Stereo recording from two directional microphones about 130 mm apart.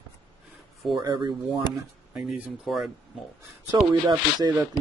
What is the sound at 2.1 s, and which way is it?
Speech, 10° right (ahead or behind).